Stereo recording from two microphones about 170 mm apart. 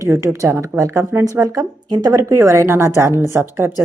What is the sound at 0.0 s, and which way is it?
A woman's voice, 15° right (ahead or behind).